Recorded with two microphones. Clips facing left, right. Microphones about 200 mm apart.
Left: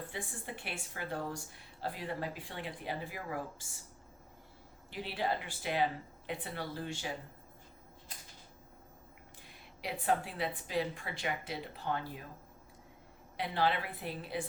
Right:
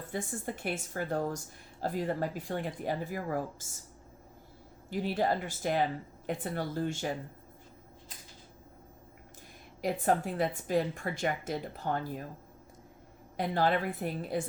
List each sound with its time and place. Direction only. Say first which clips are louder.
0.1 s a woman's voice: right 7 dB; 45° right (ahead or behind)
4.9 s a woman's voice: right 6 dB; 45° right (ahead or behind)
9.8 s a woman's voice: right 5 dB; 45° right (ahead or behind)
13.3 s a woman's voice: right 4 dB; 45° right (ahead or behind)